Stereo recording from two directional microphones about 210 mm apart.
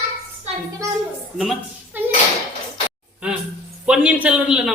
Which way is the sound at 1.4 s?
Centre (ahead or behind).